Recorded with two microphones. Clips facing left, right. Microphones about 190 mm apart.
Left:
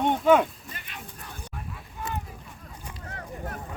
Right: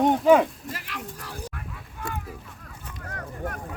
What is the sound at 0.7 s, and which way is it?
Speech, 90° right.